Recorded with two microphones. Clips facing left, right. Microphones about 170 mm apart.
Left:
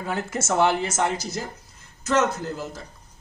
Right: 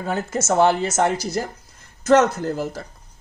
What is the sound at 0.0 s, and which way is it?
Speech, 40° right (ahead or behind).